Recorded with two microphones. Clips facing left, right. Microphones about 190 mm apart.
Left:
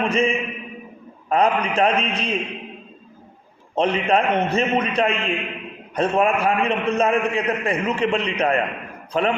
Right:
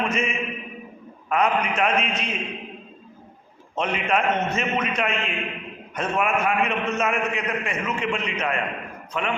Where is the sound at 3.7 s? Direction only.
35° left (ahead or behind).